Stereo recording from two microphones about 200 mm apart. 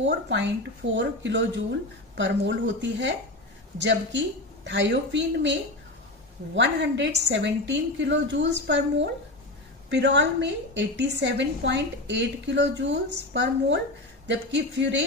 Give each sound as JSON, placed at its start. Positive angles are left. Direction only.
{"t": 0.0, "sound": "a woman's voice", "side_deg": -65}